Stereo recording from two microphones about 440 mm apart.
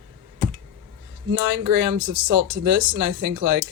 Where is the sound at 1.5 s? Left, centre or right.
Right.